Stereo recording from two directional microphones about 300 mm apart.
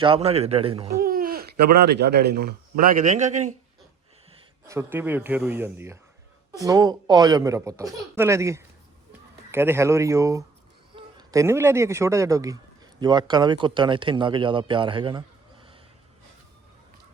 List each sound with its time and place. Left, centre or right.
0.0 s speech: centre
4.6 s speech: centre